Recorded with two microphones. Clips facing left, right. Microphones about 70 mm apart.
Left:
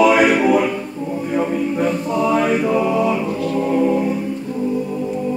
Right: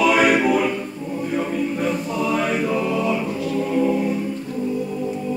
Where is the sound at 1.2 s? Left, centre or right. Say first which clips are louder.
Left 3 dB; centre.